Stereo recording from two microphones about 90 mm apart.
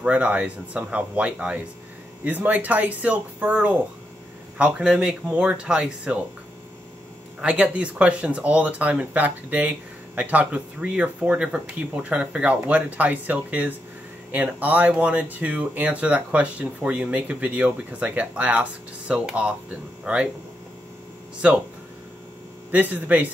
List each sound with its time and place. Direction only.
0.0 s speech: 15° right (ahead or behind)
7.4 s speech: 15° right (ahead or behind)
22.7 s speech: 20° right (ahead or behind)